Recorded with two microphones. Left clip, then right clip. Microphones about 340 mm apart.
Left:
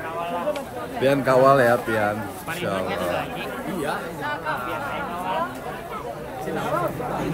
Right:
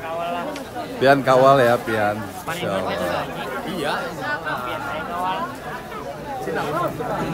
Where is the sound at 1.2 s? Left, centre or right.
Centre.